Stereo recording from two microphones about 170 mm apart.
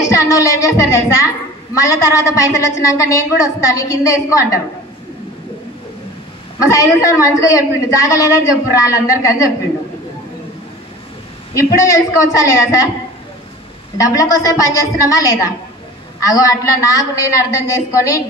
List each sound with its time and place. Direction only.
0.0 s a woman's voice: 20° left (ahead or behind)
6.6 s a woman's voice: 20° left (ahead or behind)
11.5 s a woman's voice: 20° left (ahead or behind)
13.9 s a woman's voice: 20° left (ahead or behind)